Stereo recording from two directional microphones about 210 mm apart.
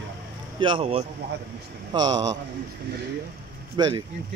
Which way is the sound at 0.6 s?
25° right (ahead or behind).